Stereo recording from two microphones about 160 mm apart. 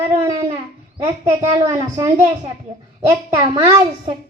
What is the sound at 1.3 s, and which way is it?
Child singing, 20° right (ahead or behind).